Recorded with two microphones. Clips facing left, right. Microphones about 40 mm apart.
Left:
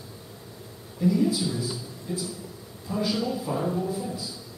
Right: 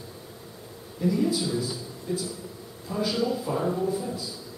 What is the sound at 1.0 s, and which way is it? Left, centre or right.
A man's voice, centre.